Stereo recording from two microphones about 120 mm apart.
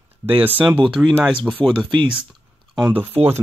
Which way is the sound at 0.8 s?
5° right (ahead or behind).